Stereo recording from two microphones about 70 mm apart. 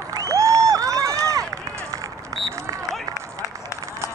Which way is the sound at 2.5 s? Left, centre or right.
Right.